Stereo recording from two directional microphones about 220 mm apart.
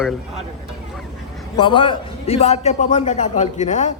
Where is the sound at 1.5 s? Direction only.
20° left (ahead or behind).